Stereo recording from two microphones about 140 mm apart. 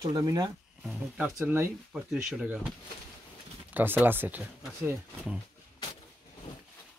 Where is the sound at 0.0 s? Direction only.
30° right (ahead or behind).